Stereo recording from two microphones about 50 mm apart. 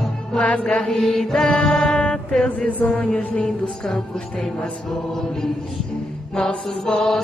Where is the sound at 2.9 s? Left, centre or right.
Left.